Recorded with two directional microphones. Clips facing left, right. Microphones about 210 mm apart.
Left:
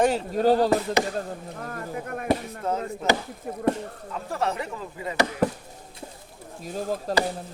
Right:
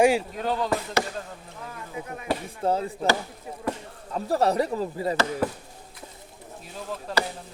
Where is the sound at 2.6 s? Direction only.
30° right (ahead or behind).